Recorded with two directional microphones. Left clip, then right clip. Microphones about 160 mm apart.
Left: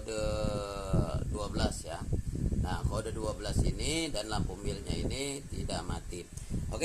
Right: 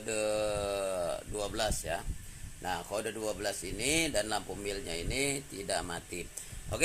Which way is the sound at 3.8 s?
50° right (ahead or behind).